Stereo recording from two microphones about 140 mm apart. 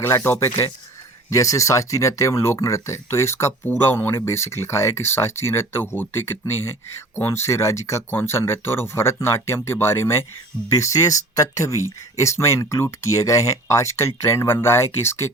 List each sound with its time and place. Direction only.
0.0 s speech: 15° left (ahead or behind)